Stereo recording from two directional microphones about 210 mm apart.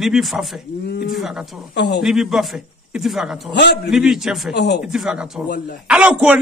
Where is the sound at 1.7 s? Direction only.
55° left (ahead or behind).